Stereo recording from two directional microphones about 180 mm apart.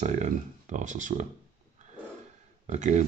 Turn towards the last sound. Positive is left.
turn(degrees=-40)  # may be behind; listen again after turning